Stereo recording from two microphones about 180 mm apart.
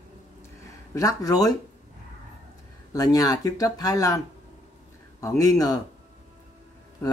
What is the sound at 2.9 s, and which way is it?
Speech, 20° left (ahead or behind).